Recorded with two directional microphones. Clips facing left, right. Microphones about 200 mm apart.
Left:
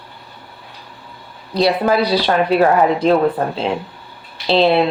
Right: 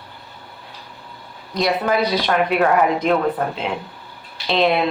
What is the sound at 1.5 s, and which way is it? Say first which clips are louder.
Speech: left 4 dB; 30° left (ahead or behind).